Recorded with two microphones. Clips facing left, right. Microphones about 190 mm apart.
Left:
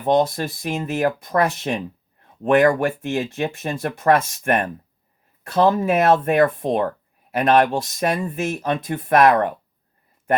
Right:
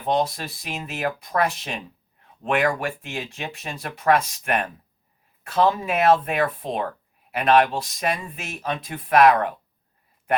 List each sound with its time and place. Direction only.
0.0 s speech: 45° left (ahead or behind)